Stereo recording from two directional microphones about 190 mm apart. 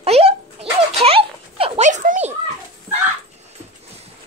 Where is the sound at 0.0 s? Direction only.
30° right (ahead or behind).